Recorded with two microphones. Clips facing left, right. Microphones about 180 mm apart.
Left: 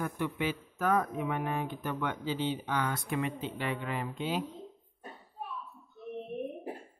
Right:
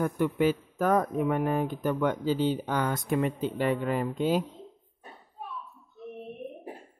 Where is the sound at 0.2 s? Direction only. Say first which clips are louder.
Right 10 dB; 40° right (ahead or behind).